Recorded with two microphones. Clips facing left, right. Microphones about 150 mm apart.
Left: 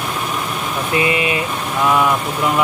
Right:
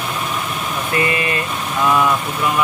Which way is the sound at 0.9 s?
15° left (ahead or behind).